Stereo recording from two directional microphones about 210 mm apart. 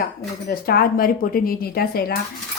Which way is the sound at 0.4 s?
45° left (ahead or behind).